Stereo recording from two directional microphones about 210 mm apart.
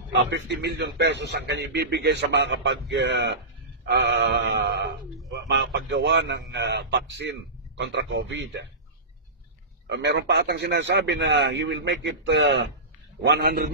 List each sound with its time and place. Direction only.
0.1 s a man's voice: 55° right (ahead or behind)
9.8 s a man's voice: 55° right (ahead or behind)